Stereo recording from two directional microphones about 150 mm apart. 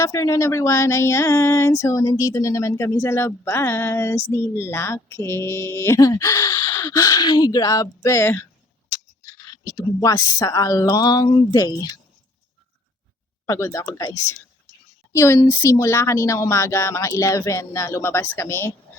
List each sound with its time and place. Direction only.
0.0 s speech: 20° left (ahead or behind)
9.6 s speech: 20° left (ahead or behind)
13.5 s speech: 20° left (ahead or behind)